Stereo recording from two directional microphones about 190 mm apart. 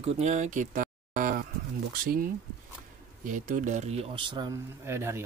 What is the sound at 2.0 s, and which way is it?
Speech, 50° right (ahead or behind).